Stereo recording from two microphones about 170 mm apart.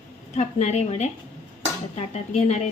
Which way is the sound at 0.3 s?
40° left (ahead or behind).